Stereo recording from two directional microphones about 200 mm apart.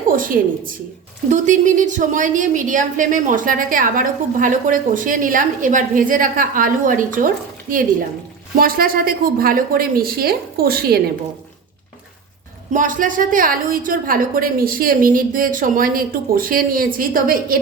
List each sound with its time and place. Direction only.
0.1 s a woman's voice: 45° right (ahead or behind)
12.7 s a woman's voice: 40° right (ahead or behind)